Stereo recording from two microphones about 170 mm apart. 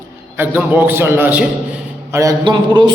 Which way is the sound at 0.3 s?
10° right (ahead or behind).